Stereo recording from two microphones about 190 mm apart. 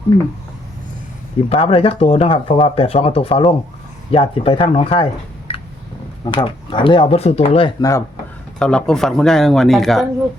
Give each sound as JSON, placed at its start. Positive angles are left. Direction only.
{"t": 1.5, "sound": "speech", "side_deg": 30}
{"t": 5.5, "sound": "a sound", "side_deg": 30}
{"t": 6.2, "sound": "speech", "side_deg": 25}
{"t": 8.5, "sound": "speech", "side_deg": 5}